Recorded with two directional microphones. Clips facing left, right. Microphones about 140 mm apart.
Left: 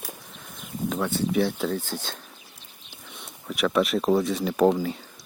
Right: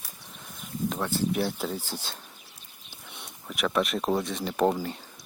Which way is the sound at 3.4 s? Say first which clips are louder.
Left 4 dB; centre (ahead or behind).